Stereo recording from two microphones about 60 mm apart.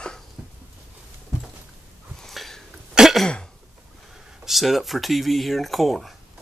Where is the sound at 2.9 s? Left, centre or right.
Centre.